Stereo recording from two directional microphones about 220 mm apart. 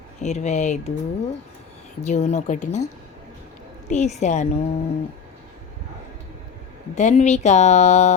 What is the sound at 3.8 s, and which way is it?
Speech, 30° left (ahead or behind).